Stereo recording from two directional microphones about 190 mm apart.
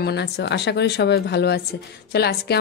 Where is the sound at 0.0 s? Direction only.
60° left (ahead or behind).